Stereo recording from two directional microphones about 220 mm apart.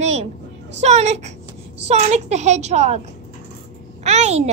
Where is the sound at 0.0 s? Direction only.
30° right (ahead or behind).